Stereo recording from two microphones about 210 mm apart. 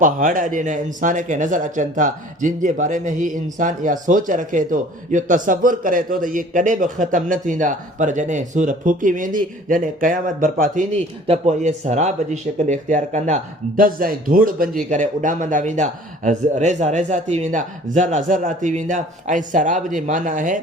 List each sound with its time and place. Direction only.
0.0 s speech: 40° right (ahead or behind)